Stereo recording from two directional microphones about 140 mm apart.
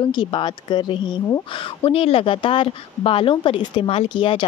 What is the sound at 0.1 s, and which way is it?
Speech, 35° left (ahead or behind).